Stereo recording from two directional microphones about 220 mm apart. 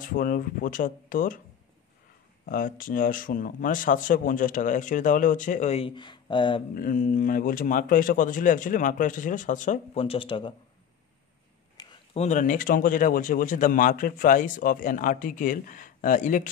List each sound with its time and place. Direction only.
0.1 s speech: 40° left (ahead or behind)
2.4 s speech: 40° left (ahead or behind); by 6.6 s 20° left (ahead or behind)
6.7 s speech: 40° left (ahead or behind); by 10.5 s 25° left (ahead or behind)
11.7 s speech: 25° left (ahead or behind)